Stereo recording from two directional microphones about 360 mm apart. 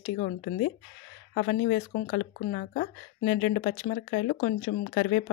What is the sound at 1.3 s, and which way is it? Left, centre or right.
Speech, left.